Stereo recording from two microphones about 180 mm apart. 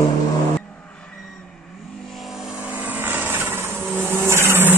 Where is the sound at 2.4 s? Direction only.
5° right (ahead or behind).